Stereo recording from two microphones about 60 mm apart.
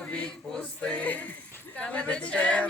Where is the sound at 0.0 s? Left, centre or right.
Centre.